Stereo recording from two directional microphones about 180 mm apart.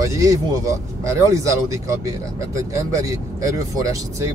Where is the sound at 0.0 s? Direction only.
20° right (ahead or behind).